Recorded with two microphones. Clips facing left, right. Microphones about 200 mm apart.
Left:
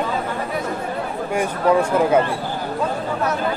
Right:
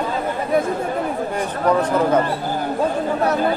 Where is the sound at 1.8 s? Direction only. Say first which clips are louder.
Even; 10° left (ahead or behind).